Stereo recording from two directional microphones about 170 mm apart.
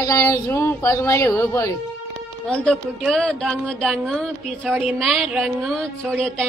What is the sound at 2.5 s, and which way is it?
Speech, 5° left (ahead or behind).